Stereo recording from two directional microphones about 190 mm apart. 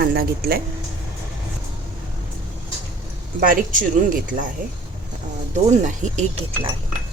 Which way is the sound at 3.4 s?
45° right (ahead or behind).